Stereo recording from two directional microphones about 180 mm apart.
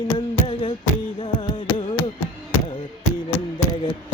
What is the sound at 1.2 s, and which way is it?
Music, 25° left (ahead or behind).